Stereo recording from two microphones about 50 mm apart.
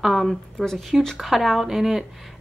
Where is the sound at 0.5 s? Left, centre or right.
Centre.